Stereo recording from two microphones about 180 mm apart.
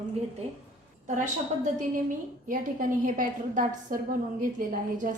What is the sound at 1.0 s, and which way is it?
A woman's voice, 40° right (ahead or behind).